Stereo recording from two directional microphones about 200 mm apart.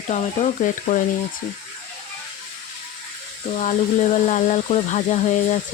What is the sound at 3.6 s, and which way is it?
Speech, 35° left (ahead or behind).